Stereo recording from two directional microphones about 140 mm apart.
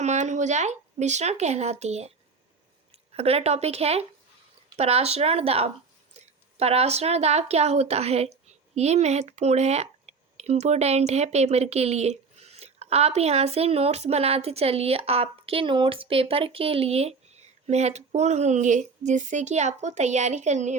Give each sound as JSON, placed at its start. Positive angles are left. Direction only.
{"t": 0.0, "sound": "a woman's voice", "side_deg": -55}